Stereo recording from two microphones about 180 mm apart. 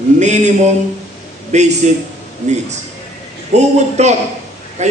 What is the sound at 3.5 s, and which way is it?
A man's voice, 40° right (ahead or behind).